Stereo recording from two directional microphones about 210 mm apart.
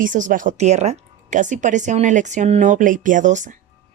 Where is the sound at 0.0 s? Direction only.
40° right (ahead or behind).